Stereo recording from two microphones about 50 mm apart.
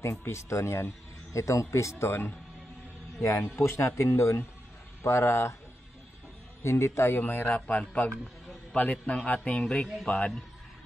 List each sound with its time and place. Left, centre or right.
0.0 s speech: left
1.3 s speech: left
3.2 s speech: left
6.6 s speech: left
7.2 s speech: left
7.5 s a man's voice: left